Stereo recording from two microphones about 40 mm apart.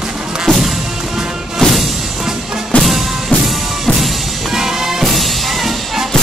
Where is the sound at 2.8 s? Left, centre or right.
Centre.